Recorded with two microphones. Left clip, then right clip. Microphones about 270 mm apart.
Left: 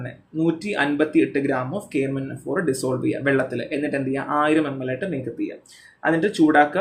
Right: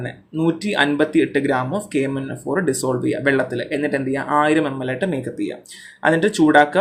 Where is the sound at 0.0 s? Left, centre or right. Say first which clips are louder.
Right 2 dB; centre.